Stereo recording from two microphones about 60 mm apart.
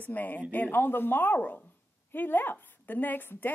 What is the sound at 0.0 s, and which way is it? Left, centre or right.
Speech, left.